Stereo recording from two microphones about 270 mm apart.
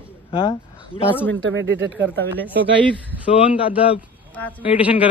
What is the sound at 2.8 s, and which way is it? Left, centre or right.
Speech, centre.